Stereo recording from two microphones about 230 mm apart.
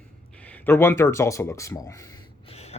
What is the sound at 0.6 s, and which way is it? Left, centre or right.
Speech, centre.